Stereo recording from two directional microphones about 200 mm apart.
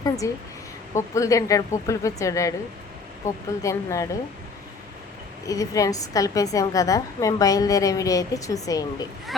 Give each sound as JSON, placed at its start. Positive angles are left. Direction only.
{"t": 0.2, "sound": "a woman's voice", "side_deg": 15}
{"t": 5.5, "sound": "a woman's voice", "side_deg": 15}